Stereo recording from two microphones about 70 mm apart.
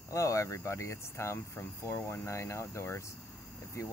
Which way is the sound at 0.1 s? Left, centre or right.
Left.